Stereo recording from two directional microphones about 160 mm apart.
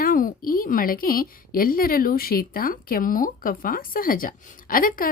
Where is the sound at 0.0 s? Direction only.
60° left (ahead or behind).